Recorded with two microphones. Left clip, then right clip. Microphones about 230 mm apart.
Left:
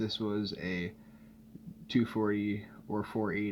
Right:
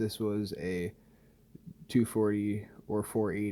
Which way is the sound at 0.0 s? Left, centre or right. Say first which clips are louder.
Right 1 dB; right.